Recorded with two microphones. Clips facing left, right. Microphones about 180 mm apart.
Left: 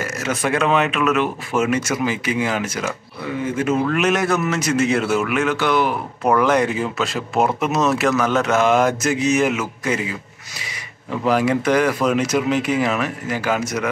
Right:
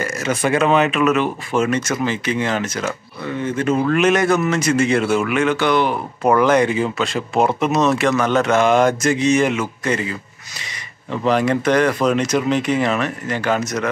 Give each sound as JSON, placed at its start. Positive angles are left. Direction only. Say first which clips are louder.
{"t": 0.0, "sound": "speech", "louder": "right 2 dB", "side_deg": 0}